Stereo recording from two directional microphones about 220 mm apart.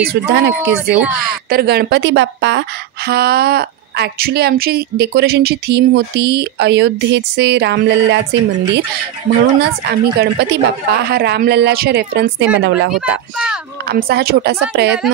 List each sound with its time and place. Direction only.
0.0 s a woman's voice: 45° right (ahead or behind)